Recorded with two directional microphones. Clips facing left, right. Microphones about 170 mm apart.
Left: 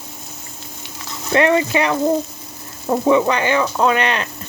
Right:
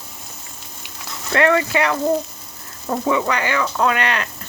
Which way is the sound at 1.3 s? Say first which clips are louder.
Left 2 dB; 20° left (ahead or behind).